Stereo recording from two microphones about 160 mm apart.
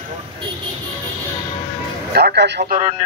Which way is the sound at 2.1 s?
90° right.